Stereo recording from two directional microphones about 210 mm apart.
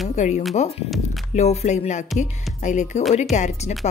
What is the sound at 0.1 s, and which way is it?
Speech, 35° left (ahead or behind).